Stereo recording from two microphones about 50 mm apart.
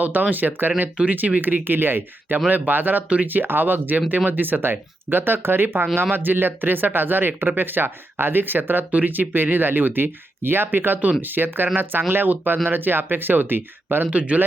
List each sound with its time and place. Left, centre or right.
0.0 s speech: right
14.1 s speech: right